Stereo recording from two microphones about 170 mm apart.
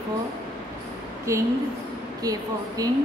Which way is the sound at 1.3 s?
15° right (ahead or behind).